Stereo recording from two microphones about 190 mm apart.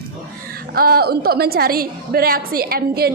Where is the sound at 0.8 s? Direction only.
55° right (ahead or behind).